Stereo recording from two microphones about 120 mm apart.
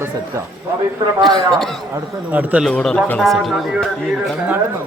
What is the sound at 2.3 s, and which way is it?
Speech, 15° right (ahead or behind).